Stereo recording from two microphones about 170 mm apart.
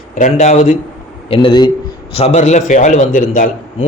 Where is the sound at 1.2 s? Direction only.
30° left (ahead or behind).